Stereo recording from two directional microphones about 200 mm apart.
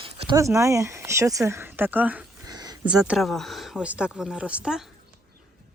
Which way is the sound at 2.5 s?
20° right (ahead or behind).